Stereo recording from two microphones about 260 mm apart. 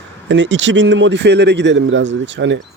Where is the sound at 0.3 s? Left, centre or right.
Right.